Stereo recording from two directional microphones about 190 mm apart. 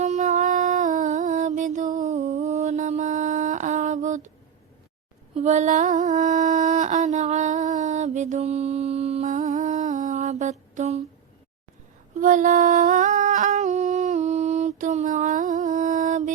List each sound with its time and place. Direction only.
0.0 s music: 40° right (ahead or behind)
5.3 s a sound: 40° right (ahead or behind)
12.1 s humming: 40° right (ahead or behind)
14.8 s mantra: 40° right (ahead or behind)